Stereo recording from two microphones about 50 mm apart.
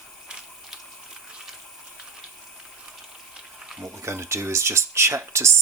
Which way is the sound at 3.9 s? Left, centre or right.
Right.